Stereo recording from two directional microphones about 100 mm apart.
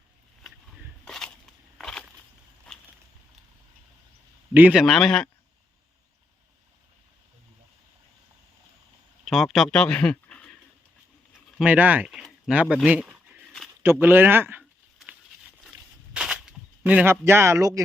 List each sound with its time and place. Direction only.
1.0 s a sound: 5° left (ahead or behind)
4.7 s a man's voice: 5° right (ahead or behind)
4.9 s a man's voice: 5° left (ahead or behind)
9.2 s speech: centre (ahead or behind)
11.6 s speech: 15° right (ahead or behind)
12.8 s a sound: 10° right (ahead or behind)
13.8 s speech: 20° right (ahead or behind)
16.1 s a sound: 5° right (ahead or behind)
17.1 s speech: 25° right (ahead or behind)